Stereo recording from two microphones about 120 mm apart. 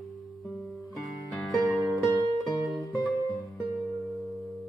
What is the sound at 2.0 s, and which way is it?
Music, 30° left (ahead or behind).